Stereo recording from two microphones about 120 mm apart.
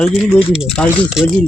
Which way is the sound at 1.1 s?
5° right (ahead or behind).